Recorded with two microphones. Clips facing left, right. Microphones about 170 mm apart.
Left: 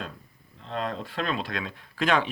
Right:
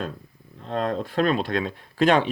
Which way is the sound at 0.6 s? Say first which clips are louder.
Right 6 dB; 45° right (ahead or behind).